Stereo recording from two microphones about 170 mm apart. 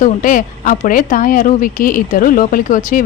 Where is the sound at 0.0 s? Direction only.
55° left (ahead or behind).